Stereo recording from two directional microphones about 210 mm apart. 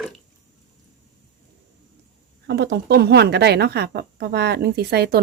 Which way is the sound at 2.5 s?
50° right (ahead or behind).